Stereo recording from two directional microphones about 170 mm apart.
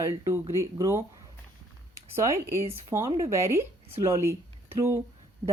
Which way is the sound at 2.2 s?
15° right (ahead or behind).